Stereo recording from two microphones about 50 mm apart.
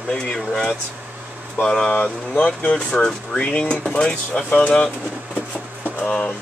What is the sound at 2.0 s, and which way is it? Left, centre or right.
Speech, left.